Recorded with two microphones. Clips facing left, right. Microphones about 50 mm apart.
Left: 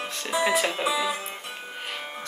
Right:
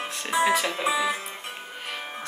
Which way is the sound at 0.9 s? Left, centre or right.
Right.